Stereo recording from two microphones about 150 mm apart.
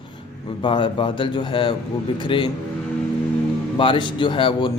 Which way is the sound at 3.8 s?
35° left (ahead or behind).